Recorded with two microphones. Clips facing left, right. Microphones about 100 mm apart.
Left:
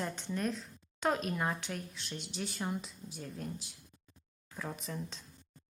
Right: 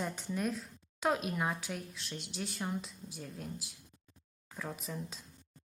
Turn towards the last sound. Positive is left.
turn(degrees=-5)  # may be behind; listen again after turning